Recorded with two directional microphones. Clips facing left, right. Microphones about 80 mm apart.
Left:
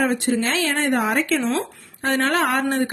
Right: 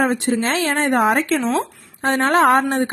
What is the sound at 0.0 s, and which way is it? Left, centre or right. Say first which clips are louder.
Speech: right 2 dB; right.